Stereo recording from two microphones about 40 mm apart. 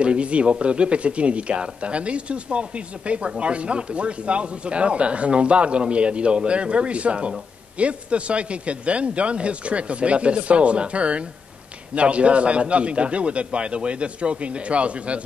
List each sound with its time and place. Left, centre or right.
0.0 s speech: right